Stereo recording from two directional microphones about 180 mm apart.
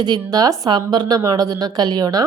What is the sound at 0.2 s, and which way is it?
A woman's voice, 20° right (ahead or behind).